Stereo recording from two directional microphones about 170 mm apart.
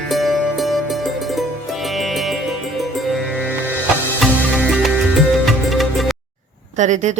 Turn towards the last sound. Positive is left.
turn(degrees=-45)  # may be behind; listen again after turning